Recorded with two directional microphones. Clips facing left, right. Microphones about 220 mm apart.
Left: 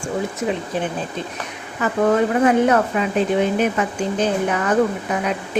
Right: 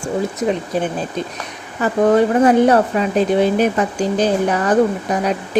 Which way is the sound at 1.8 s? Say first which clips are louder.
Right 4 dB; 35° right (ahead or behind).